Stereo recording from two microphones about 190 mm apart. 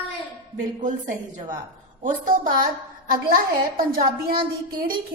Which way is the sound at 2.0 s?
45° right (ahead or behind).